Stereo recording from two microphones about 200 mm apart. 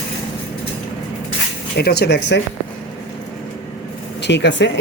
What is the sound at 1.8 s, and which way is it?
Speech, 50° left (ahead or behind).